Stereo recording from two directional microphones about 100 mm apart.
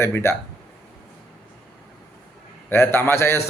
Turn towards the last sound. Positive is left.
turn(degrees=25)  # may be behind; listen again after turning